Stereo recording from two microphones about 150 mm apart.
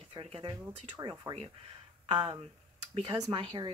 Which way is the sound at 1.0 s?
30° right (ahead or behind).